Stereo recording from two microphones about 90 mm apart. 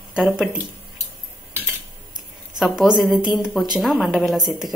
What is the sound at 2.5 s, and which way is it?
A woman's voice, 5° right (ahead or behind).